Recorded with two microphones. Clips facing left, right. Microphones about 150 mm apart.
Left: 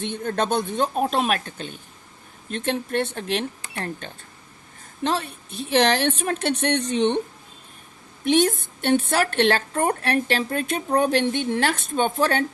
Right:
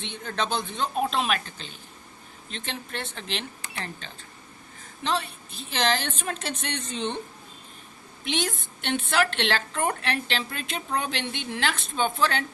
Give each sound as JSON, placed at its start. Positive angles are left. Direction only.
{"t": 0.0, "sound": "a woman's voice", "side_deg": 50}
{"t": 5.0, "sound": "a woman's voice", "side_deg": 55}
{"t": 8.2, "sound": "a woman's voice", "side_deg": 50}